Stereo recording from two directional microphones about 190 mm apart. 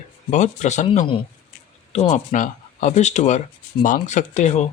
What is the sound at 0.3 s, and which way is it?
Speech, 40° left (ahead or behind).